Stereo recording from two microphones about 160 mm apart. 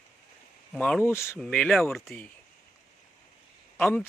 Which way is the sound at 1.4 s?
5° left (ahead or behind).